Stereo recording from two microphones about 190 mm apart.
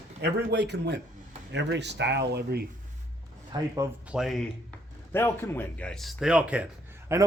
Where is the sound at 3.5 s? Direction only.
20° right (ahead or behind).